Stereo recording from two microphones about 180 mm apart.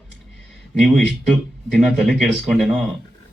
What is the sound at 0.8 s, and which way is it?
A man's voice, centre (ahead or behind).